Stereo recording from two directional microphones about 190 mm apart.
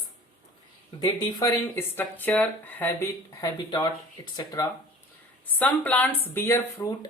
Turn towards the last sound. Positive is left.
turn(degrees=15)  # may be behind; listen again after turning